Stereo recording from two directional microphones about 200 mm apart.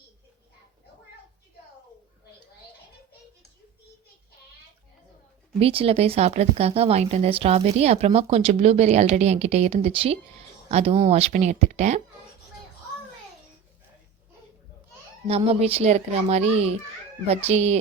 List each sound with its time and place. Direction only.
5.5 s speech: 30° right (ahead or behind)
15.3 s speech: 30° right (ahead or behind)